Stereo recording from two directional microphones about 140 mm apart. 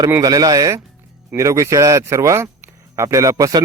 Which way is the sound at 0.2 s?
25° right (ahead or behind).